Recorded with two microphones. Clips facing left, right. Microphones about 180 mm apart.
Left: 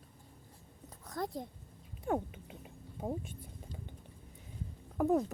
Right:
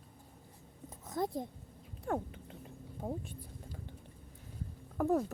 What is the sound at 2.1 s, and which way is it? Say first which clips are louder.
Speech: left 2 dB; 10° left (ahead or behind).